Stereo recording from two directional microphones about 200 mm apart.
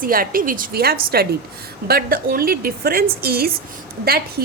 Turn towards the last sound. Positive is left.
turn(degrees=-50)  # may be behind; listen again after turning